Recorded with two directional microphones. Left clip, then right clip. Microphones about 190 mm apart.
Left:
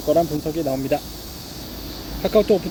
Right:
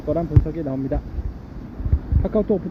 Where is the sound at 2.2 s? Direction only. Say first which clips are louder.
Left 5 dB; 10° left (ahead or behind).